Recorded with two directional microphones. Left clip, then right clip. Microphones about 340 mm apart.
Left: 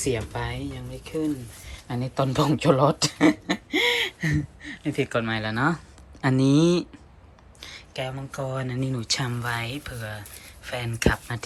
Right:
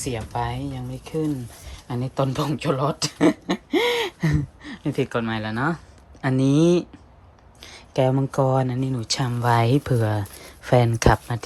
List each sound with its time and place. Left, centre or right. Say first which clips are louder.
0.0 s speech: right 1 dB; centre